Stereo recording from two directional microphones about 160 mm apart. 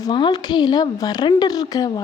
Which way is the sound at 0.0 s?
25° left (ahead or behind).